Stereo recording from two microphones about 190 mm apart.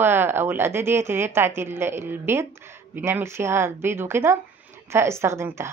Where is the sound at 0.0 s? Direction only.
10° right (ahead or behind).